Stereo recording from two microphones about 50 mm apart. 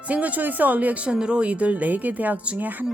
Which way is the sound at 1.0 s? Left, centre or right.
Centre.